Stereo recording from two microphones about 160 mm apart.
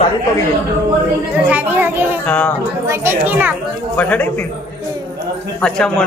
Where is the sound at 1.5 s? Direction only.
10° right (ahead or behind).